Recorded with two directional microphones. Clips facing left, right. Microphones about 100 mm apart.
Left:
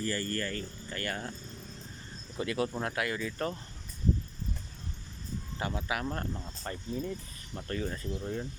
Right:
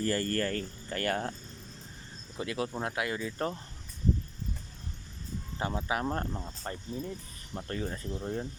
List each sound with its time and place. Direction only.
0.0 s speech: 45° right (ahead or behind)
2.4 s speech: 15° right (ahead or behind)
5.5 s speech: 30° right (ahead or behind)
6.9 s speech: 10° right (ahead or behind)
7.5 s speech: 25° right (ahead or behind)